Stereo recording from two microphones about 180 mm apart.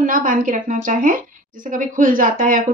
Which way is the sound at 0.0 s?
50° right (ahead or behind).